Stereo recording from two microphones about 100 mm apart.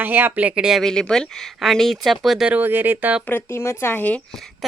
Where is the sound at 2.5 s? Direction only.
20° right (ahead or behind).